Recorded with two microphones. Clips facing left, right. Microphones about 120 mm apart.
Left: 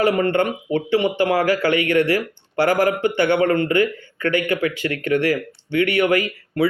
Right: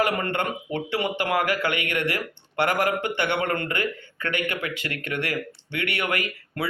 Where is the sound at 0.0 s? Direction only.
30° left (ahead or behind).